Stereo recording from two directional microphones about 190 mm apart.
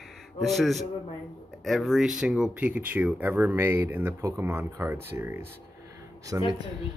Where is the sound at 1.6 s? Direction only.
Centre (ahead or behind); by 6.4 s 20° right (ahead or behind).